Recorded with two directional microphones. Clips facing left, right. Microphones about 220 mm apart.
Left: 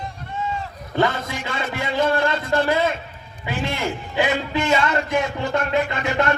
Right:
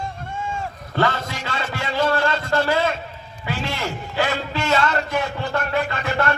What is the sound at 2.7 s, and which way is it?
A man's voice, 15° left (ahead or behind).